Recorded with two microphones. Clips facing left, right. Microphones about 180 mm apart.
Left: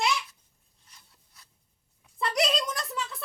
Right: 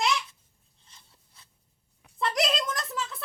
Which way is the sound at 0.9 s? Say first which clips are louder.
Right 1 dB; 25° right (ahead or behind).